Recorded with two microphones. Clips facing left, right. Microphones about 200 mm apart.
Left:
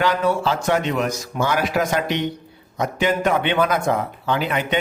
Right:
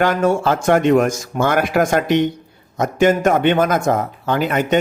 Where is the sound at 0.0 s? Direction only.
50° right (ahead or behind).